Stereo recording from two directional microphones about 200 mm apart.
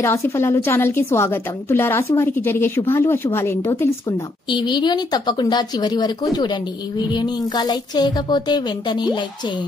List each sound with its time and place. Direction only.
0.0 s a woman's voice: 15° left (ahead or behind)
4.5 s a woman's voice: 20° left (ahead or behind)